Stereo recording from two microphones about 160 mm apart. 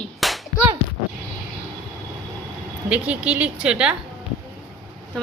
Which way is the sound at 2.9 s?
10° right (ahead or behind).